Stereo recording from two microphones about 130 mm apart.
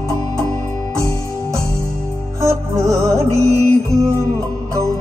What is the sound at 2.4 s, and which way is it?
Music, 20° right (ahead or behind).